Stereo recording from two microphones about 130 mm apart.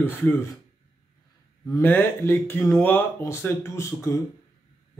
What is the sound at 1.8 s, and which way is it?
A man's voice, 15° left (ahead or behind).